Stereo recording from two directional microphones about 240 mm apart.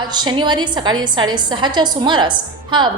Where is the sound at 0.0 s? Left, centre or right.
Centre.